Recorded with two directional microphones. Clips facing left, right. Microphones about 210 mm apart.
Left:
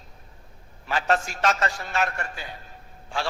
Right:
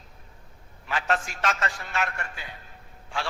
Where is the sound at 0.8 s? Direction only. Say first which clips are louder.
Left 3 dB; 40° left (ahead or behind).